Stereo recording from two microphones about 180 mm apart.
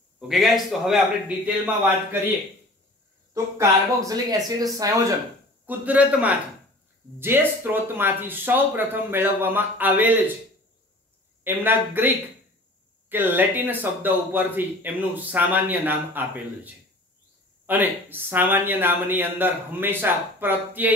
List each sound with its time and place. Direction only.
0.3 s a man's voice: centre (ahead or behind)
3.5 s speech: 20° right (ahead or behind)
5.7 s speech: 10° right (ahead or behind)
11.4 s speech: 10° right (ahead or behind)
13.1 s speech: 10° right (ahead or behind)